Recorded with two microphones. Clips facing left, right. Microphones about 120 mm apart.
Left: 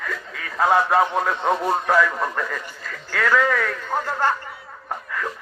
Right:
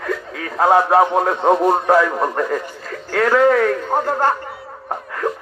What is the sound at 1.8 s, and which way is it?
Speech, 35° right (ahead or behind).